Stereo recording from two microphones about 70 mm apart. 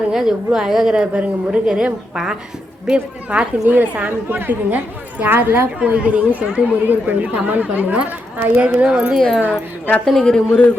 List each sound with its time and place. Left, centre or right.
0.1 s a woman's voice: centre
10.1 s a man's voice: centre